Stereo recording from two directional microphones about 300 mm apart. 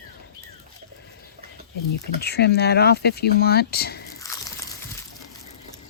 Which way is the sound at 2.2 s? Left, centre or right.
Left.